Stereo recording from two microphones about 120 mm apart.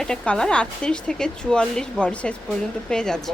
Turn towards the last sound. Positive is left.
turn(degrees=5)  # may be behind; listen again after turning